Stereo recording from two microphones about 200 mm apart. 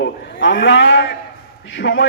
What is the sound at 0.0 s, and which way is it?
A man's voice, 65° left (ahead or behind).